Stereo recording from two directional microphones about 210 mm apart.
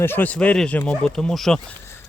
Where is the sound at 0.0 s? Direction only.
10° left (ahead or behind).